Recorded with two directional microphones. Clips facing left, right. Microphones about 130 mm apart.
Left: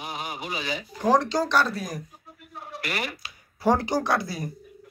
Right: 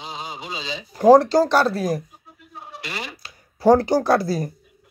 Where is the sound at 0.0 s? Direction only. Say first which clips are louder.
Even; 20° right (ahead or behind).